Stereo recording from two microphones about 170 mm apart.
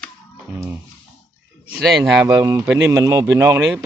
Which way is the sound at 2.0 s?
10° right (ahead or behind).